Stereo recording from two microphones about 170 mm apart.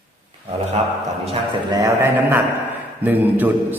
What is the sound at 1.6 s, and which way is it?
A man's voice, 15° right (ahead or behind).